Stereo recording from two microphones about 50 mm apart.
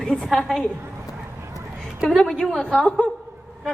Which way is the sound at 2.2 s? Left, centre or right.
Centre.